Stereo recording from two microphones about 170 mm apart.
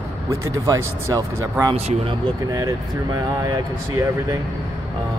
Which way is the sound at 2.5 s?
20° right (ahead or behind).